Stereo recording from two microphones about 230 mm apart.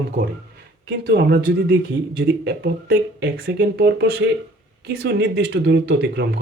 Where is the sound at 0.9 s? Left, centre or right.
Right.